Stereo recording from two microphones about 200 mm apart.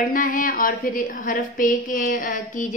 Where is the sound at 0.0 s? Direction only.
45° left (ahead or behind).